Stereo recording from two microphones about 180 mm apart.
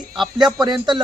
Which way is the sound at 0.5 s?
25° right (ahead or behind).